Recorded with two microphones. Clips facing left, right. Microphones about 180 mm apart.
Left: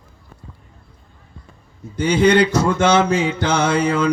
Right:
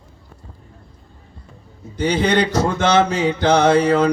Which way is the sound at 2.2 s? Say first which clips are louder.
Left 5 dB; 45° right (ahead or behind).